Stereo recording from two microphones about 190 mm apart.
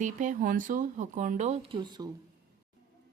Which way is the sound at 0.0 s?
40° right (ahead or behind).